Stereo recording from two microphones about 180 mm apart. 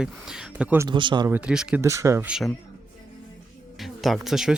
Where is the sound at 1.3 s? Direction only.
5° right (ahead or behind).